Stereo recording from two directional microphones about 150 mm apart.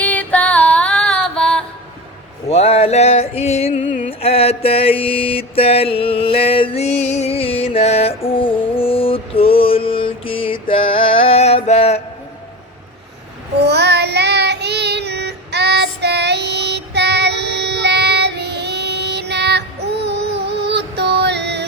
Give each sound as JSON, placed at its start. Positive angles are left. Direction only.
{"t": 0.0, "sound": "female singing", "side_deg": 10}
{"t": 2.5, "sound": "a sound", "side_deg": 45}
{"t": 4.0, "sound": "mantra", "side_deg": 40}
{"t": 13.6, "sound": "child singing", "side_deg": -90}